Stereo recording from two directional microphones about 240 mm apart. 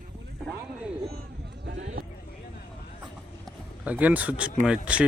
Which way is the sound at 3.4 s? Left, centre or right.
Centre.